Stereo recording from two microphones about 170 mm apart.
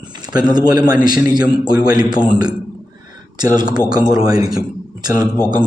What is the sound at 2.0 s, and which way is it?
A man's voice, 25° right (ahead or behind).